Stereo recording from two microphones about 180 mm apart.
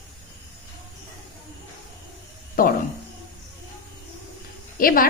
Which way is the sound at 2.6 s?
50° left (ahead or behind).